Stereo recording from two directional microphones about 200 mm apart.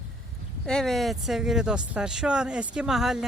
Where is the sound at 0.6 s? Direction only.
Centre (ahead or behind).